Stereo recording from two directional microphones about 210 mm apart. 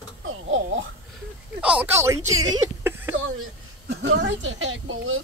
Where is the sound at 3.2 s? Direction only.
70° right (ahead or behind).